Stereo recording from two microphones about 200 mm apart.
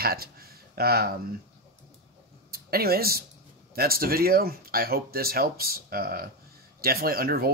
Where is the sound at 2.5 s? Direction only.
50° right (ahead or behind).